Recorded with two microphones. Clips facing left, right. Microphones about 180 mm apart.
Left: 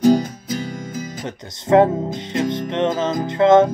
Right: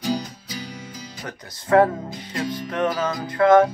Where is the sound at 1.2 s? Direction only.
25° left (ahead or behind).